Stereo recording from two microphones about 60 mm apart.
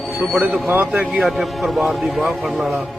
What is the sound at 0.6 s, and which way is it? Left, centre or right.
Speech, right.